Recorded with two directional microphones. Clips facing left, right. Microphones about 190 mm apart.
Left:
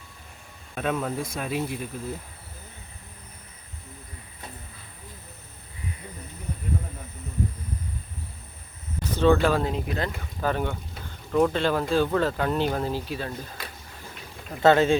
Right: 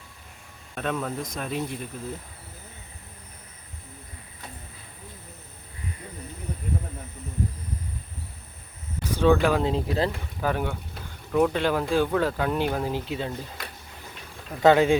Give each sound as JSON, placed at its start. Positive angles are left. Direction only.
{"t": 0.8, "sound": "speech", "side_deg": 5}
{"t": 9.0, "sound": "speech", "side_deg": -10}
{"t": 9.6, "sound": "speech", "side_deg": -30}
{"t": 10.4, "sound": "a sound", "side_deg": -10}
{"t": 11.5, "sound": "speech", "side_deg": -10}
{"t": 14.6, "sound": "speech", "side_deg": -15}